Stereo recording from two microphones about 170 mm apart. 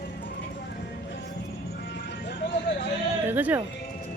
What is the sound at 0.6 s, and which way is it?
Music, 90° left.